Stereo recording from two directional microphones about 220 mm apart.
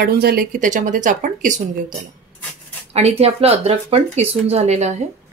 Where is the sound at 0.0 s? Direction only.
45° right (ahead or behind).